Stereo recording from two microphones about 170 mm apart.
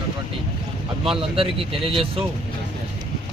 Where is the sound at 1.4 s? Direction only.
30° right (ahead or behind).